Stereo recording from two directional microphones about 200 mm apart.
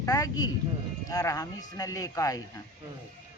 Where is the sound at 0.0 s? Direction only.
15° left (ahead or behind).